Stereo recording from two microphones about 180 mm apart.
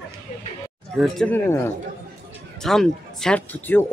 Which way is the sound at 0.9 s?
Centre (ahead or behind).